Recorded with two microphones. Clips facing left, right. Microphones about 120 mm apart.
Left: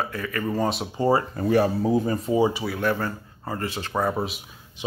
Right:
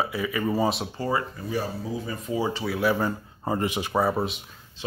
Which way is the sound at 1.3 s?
60° left (ahead or behind).